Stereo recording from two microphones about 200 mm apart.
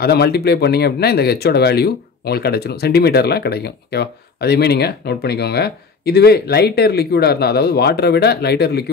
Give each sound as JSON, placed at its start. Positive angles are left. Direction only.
{"t": 0.0, "sound": "speech", "side_deg": 55}